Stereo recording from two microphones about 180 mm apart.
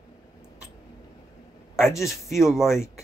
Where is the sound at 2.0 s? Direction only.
Centre (ahead or behind).